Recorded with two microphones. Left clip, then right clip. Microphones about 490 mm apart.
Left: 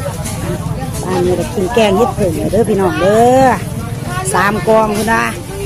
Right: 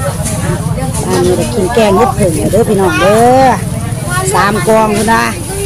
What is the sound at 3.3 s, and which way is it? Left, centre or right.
Speech, left.